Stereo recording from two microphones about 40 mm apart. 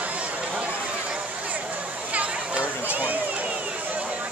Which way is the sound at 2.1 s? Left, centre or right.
Right.